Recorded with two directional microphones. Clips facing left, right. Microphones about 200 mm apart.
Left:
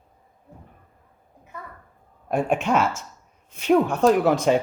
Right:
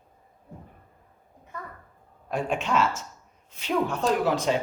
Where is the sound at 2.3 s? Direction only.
55° left (ahead or behind).